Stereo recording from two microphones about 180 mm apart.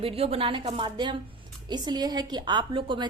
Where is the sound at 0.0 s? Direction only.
30° right (ahead or behind).